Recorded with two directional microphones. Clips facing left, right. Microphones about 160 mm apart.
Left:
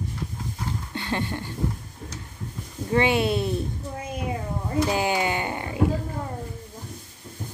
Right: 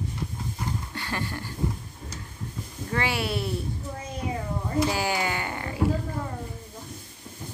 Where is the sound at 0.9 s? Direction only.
20° left (ahead or behind).